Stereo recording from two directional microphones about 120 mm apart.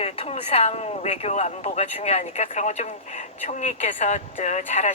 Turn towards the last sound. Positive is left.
turn(degrees=70)  # may be behind; listen again after turning